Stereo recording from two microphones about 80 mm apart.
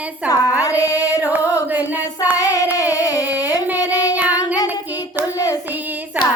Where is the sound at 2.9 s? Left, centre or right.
Left.